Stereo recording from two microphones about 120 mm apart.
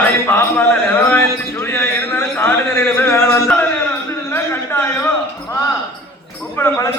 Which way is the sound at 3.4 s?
10° left (ahead or behind).